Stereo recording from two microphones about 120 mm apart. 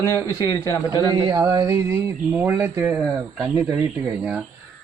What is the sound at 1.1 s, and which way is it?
Speech, 30° right (ahead or behind).